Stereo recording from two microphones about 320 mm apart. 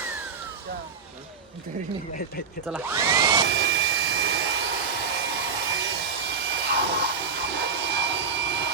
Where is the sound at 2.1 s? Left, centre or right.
Left.